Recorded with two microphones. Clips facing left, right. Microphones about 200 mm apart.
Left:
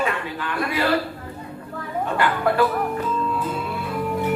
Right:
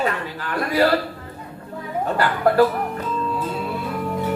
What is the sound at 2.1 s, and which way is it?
Speech, 40° right (ahead or behind).